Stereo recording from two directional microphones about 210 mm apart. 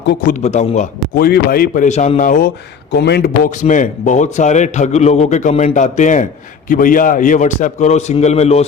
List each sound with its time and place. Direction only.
0.3 s speech: 35° left (ahead or behind)
1.1 s speech: 45° left (ahead or behind)
2.9 s speech: 50° left (ahead or behind); by 8.6 s 30° left (ahead or behind)